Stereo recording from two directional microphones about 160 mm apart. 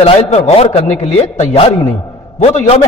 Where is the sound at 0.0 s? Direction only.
40° left (ahead or behind).